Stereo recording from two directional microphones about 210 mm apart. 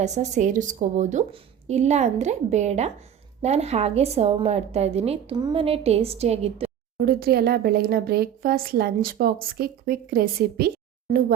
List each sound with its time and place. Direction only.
0.0 s a woman's voice: 35° right (ahead or behind)
7.0 s speech: 45° right (ahead or behind)